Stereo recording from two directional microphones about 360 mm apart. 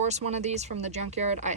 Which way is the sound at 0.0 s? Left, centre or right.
Centre.